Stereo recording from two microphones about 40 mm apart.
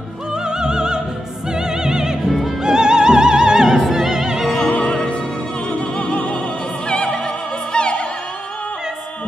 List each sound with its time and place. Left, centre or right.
0.5 s opera: centre
1.5 s music: centre
3.9 s opera: centre
4.4 s music: centre
4.7 s music: left
6.9 s opera: left